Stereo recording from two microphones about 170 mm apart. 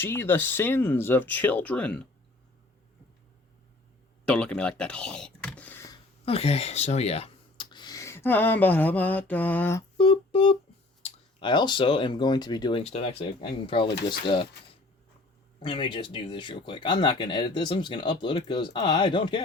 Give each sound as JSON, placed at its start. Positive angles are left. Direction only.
{"t": 0.0, "sound": "speech", "side_deg": 15}
{"t": 4.3, "sound": "speech", "side_deg": 5}
{"t": 6.2, "sound": "speech", "side_deg": 35}
{"t": 10.0, "sound": "music", "side_deg": 30}
{"t": 11.0, "sound": "speech", "side_deg": 30}
{"t": 15.6, "sound": "speech", "side_deg": 30}